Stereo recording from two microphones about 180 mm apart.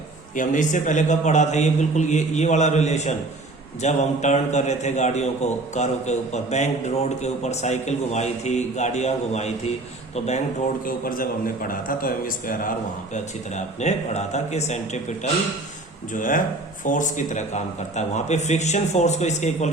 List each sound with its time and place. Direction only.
0.3 s a man's voice: 45° left (ahead or behind)
10.8 s a man's voice: 50° left (ahead or behind)
13.1 s a man's voice: 40° left (ahead or behind)